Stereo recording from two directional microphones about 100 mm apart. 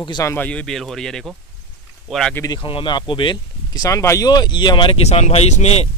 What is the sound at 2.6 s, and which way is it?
Speech, 60° left (ahead or behind).